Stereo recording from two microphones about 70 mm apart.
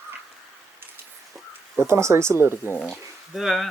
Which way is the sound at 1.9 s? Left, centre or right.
Right.